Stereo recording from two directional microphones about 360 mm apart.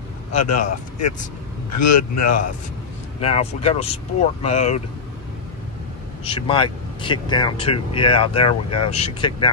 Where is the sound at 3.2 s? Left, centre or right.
Centre.